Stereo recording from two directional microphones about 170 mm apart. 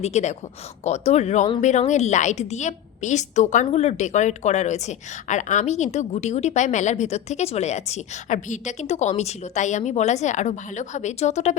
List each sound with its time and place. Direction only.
0.0 s a woman's voice: 40° left (ahead or behind)